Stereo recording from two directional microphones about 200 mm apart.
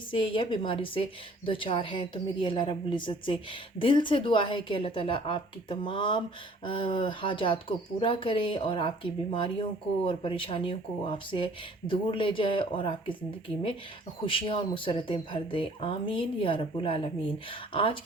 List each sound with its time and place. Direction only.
0.1 s speech: 25° left (ahead or behind)
14.3 s speech: 25° left (ahead or behind)